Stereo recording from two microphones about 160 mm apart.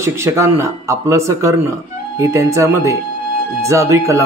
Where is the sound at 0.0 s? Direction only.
15° right (ahead or behind).